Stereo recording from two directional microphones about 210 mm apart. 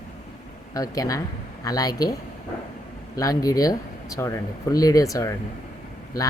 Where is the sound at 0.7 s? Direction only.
15° left (ahead or behind).